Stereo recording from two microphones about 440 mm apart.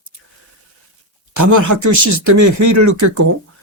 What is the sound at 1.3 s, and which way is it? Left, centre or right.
Speech, right.